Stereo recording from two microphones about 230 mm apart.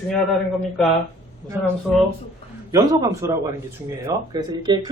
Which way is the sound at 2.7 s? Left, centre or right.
Centre.